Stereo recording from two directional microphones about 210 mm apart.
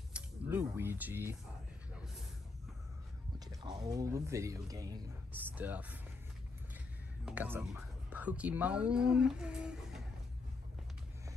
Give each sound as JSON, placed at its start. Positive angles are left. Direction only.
{"t": 0.1, "sound": "mechanisms", "side_deg": -10}
{"t": 3.3, "sound": "speech", "side_deg": -20}
{"t": 7.2, "sound": "speech", "side_deg": -10}